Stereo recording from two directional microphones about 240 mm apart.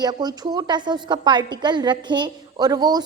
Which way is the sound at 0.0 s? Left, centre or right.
Centre.